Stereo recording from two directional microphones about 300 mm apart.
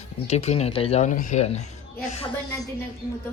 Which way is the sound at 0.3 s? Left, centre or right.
Left.